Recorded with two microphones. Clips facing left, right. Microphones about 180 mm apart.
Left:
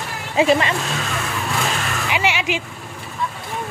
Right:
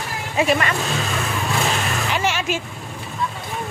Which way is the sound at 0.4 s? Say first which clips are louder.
Left 3 dB; 25° left (ahead or behind).